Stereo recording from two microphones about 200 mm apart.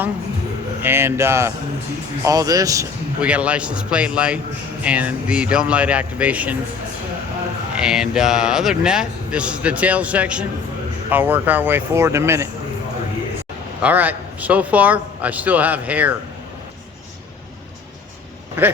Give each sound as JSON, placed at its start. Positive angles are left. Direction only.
{"t": 0.8, "sound": "a man's voice", "side_deg": -10}
{"t": 3.2, "sound": "a man's voice", "side_deg": -5}
{"t": 7.8, "sound": "a man's voice", "side_deg": -5}
{"t": 13.8, "sound": "a man's voice", "side_deg": -10}